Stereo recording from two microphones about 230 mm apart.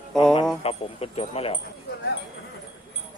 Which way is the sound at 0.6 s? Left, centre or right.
Left.